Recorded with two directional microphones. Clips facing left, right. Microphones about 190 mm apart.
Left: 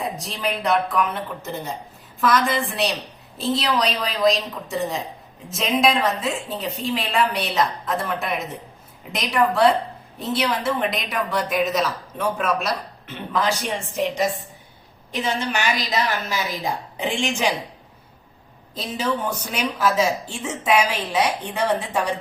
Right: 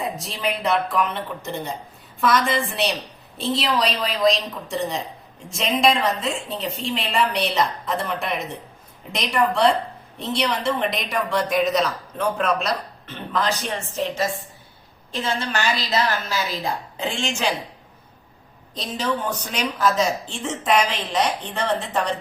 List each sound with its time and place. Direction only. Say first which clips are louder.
0.0 s a woman's voice: even; centre (ahead or behind)
18.7 s a man's voice: left 1 dB; 5° left (ahead or behind)